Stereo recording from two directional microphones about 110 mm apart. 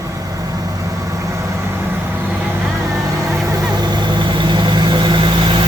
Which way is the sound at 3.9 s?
45° right (ahead or behind).